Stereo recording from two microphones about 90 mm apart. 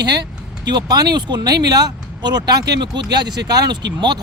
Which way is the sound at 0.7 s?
50° right (ahead or behind).